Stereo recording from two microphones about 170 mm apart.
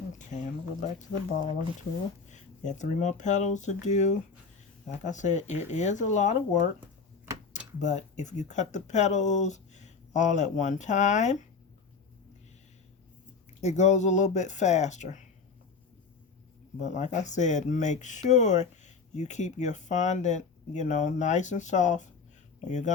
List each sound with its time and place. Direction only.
0.2 s speech: 45° left (ahead or behind)
7.8 s speech: 45° left (ahead or behind)
13.6 s speech: 40° left (ahead or behind)
16.8 s speech: 45° left (ahead or behind)